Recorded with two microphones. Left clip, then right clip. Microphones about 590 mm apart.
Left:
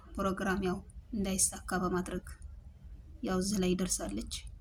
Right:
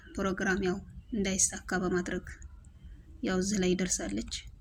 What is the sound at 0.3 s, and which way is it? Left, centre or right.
Speech, left.